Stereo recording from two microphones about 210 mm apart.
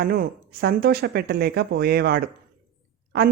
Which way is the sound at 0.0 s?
45° right (ahead or behind).